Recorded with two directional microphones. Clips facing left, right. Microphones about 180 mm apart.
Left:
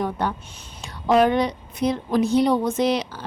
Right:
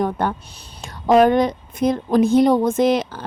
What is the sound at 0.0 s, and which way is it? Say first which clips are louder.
A woman's voice: right 4 dB; 50° right (ahead or behind).